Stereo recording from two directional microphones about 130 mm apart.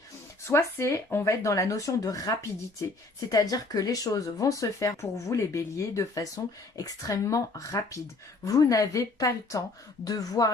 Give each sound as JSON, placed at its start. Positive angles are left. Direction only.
{"t": 0.4, "sound": "speech", "side_deg": 20}